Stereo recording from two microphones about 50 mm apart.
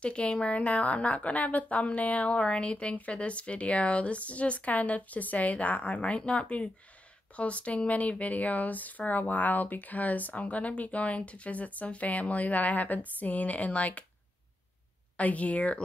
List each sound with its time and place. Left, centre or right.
0.0 s a woman's voice: left
15.1 s a woman's voice: left